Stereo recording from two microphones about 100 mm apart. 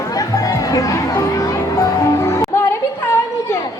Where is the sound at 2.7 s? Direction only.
30° left (ahead or behind).